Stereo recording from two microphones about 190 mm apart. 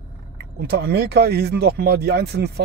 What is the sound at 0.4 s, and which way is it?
Speech, 60° right (ahead or behind).